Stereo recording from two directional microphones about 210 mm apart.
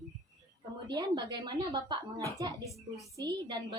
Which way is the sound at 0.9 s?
20° right (ahead or behind).